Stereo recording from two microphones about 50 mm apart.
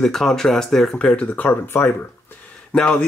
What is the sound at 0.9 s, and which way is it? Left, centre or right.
Speech, left.